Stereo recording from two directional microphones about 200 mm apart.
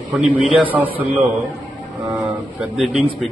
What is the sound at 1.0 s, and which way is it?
Mantra, 5° right (ahead or behind).